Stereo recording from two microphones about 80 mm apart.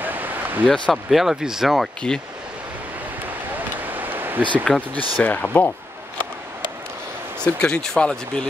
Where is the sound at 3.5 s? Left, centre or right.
Right.